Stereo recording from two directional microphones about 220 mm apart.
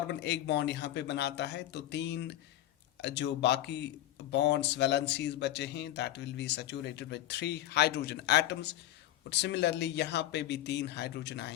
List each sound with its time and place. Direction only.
0.1 s speech: 50° left (ahead or behind)